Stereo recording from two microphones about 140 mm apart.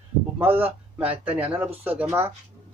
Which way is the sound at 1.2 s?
10° right (ahead or behind).